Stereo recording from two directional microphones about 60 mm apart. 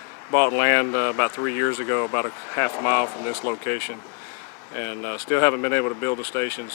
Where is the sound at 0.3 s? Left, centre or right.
Left.